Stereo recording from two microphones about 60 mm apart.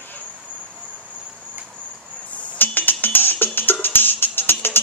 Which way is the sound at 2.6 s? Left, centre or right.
Left.